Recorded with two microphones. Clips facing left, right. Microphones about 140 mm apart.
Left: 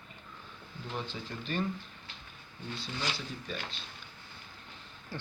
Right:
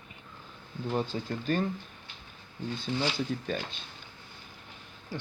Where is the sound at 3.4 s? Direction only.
50° right (ahead or behind).